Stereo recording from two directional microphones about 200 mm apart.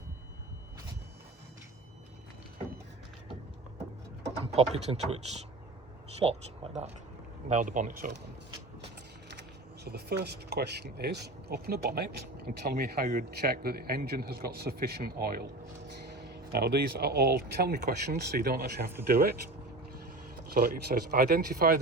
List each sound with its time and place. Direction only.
4.4 s speech: 30° right (ahead or behind)
6.2 s speech: 25° right (ahead or behind)
7.4 s speech: 40° right (ahead or behind)
9.8 s speech: 55° right (ahead or behind)
20.5 s speech: 50° right (ahead or behind)